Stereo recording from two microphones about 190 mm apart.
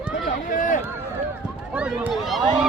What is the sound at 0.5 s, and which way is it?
Speech, 45° left (ahead or behind).